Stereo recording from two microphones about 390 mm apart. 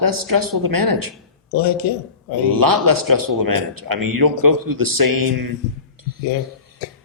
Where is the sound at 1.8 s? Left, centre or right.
Left.